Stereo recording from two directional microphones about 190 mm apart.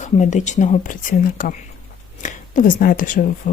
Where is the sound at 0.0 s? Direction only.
40° left (ahead or behind).